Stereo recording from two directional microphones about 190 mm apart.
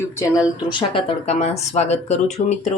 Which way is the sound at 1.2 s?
35° left (ahead or behind).